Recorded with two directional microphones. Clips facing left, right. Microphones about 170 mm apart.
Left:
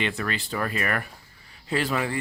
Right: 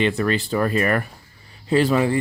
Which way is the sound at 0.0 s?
35° right (ahead or behind).